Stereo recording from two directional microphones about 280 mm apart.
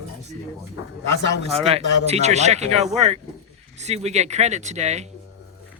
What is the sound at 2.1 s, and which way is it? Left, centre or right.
Speech, right.